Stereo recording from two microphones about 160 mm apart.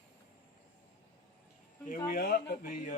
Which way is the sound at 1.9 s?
80° left.